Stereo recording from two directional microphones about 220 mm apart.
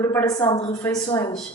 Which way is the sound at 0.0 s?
10° left (ahead or behind).